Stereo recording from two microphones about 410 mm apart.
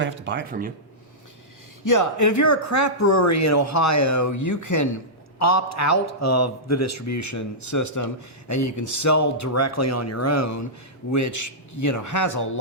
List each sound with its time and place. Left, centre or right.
0.0 s speech: right
1.8 s a man's voice: left